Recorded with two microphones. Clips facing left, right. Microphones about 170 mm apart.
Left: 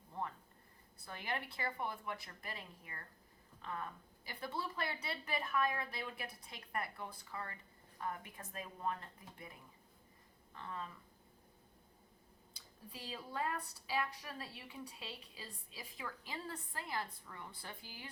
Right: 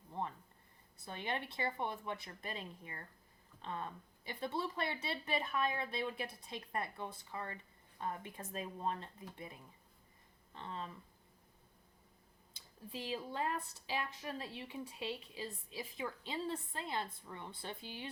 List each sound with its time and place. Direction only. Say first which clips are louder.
0.1 s a sound: right 2 dB; 20° right (ahead or behind)
1.0 s a woman's voice: right 2 dB; 25° right (ahead or behind)
12.5 s a woman's voice: right 7 dB; 20° right (ahead or behind)